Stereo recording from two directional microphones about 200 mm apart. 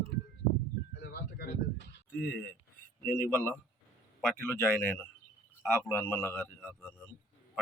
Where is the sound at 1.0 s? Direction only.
50° left (ahead or behind).